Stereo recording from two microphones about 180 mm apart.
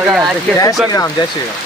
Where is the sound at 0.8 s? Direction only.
20° left (ahead or behind).